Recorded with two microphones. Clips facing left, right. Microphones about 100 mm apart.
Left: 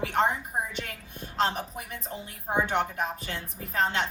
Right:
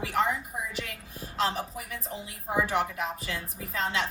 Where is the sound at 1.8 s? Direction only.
35° left (ahead or behind).